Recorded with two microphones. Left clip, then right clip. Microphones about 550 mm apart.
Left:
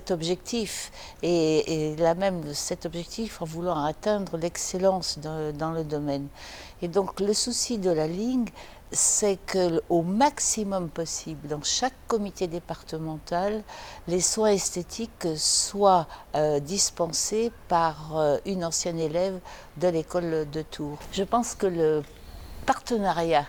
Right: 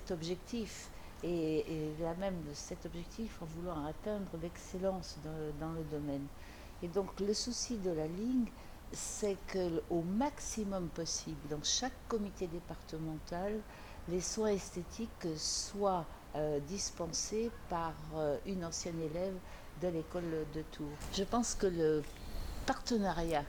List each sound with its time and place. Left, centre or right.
0.1 s speech: left